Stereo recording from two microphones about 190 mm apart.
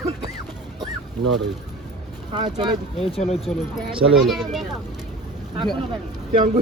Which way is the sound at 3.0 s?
30° left (ahead or behind).